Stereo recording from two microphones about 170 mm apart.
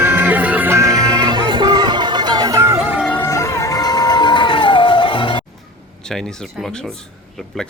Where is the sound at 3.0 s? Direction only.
10° left (ahead or behind); by 5.4 s 30° left (ahead or behind).